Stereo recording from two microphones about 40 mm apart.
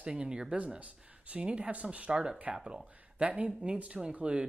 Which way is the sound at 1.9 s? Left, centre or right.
Right.